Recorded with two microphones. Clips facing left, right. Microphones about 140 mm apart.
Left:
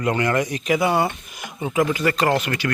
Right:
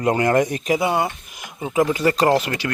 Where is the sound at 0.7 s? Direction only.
20° right (ahead or behind).